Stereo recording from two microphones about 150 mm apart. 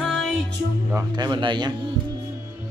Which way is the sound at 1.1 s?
30° right (ahead or behind).